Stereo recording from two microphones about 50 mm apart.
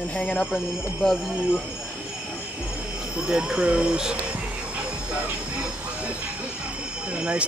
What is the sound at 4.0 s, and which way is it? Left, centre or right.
Vehicle, centre.